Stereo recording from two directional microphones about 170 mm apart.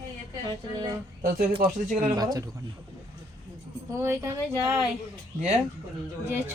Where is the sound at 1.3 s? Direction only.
55° right (ahead or behind).